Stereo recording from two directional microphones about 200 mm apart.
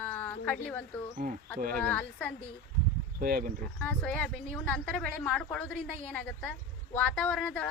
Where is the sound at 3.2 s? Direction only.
45° right (ahead or behind).